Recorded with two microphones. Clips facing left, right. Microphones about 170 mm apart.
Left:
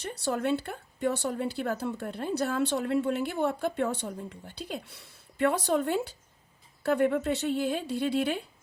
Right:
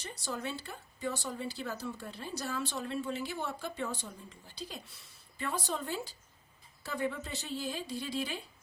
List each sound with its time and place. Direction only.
0.0 s speech: 65° left (ahead or behind)